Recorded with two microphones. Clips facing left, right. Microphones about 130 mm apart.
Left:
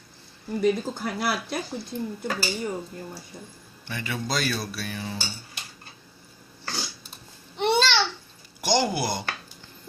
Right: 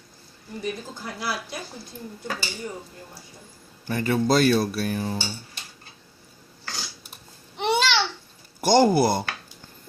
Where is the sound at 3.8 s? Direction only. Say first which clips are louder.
Right 9 dB; 45° right (ahead or behind).